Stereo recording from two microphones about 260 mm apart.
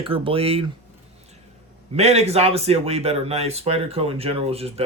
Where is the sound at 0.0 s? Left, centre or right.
Right.